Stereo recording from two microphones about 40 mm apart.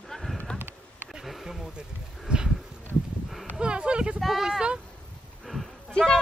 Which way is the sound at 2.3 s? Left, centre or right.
Right.